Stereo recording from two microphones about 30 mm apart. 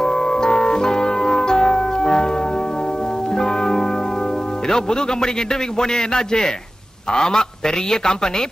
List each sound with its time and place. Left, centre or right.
0.0 s music: left
4.6 s a man's voice: left